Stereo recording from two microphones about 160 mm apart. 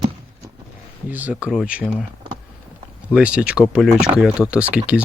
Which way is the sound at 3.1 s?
5° right (ahead or behind).